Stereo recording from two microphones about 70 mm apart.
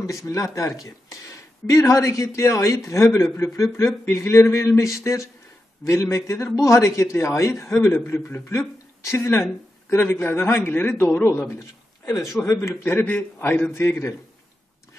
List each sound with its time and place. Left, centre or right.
0.0 s a man's voice: left
12.1 s a man's voice: left
12.4 s a man's voice: left
13.7 s a man's voice: left